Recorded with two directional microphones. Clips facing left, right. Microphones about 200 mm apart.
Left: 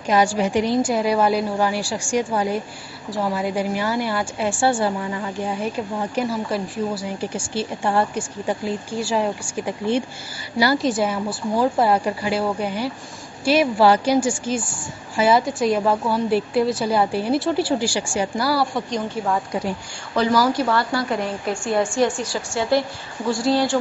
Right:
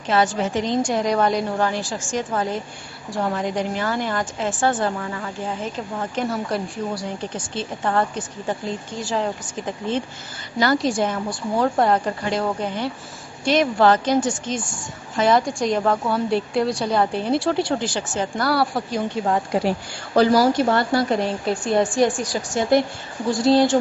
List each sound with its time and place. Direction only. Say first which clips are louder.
0.0 s a woman's voice: left 2 dB; 10° left (ahead or behind)
19.2 s a woman's voice: right 3 dB; 30° right (ahead or behind)